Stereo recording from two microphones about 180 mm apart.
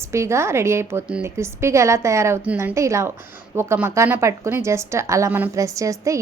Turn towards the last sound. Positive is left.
turn(degrees=-15)  # may be behind; listen again after turning